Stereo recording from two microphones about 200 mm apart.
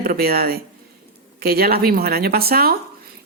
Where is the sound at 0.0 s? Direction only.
50° right (ahead or behind).